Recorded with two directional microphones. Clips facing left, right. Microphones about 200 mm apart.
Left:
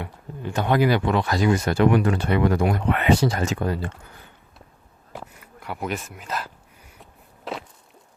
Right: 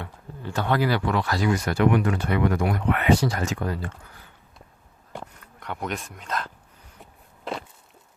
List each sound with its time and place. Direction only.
0.0 s speech: 15° left (ahead or behind)
5.1 s speech: 5° left (ahead or behind)
7.0 s a sound: centre (ahead or behind)